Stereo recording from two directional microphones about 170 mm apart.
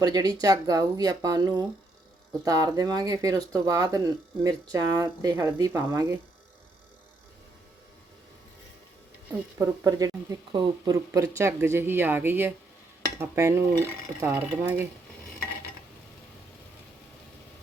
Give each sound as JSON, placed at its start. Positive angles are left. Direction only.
{"t": 0.0, "sound": "speech", "side_deg": -20}
{"t": 9.3, "sound": "speech", "side_deg": -20}